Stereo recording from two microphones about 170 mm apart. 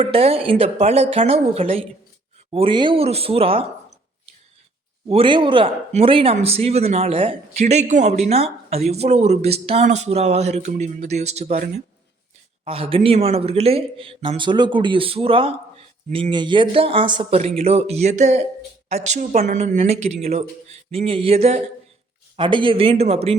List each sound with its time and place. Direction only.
0.0 s speech: 35° right (ahead or behind)
5.0 s speech: 30° right (ahead or behind)